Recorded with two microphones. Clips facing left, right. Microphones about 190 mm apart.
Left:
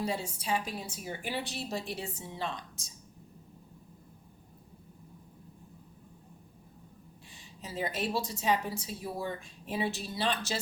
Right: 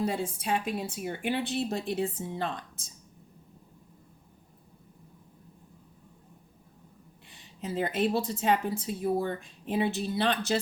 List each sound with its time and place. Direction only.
0.0 s a woman's voice: 55° right (ahead or behind)
7.3 s a woman's voice: 55° right (ahead or behind)